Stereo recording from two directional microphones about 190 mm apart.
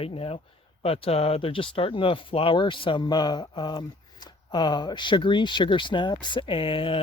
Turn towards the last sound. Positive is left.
turn(degrees=30)  # may be behind; listen again after turning